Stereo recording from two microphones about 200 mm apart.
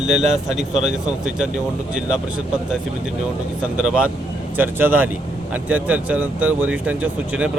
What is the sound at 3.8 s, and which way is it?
Speech, 5° right (ahead or behind).